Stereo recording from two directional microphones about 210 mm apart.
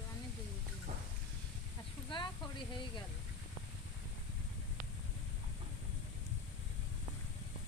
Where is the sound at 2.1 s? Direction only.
20° left (ahead or behind).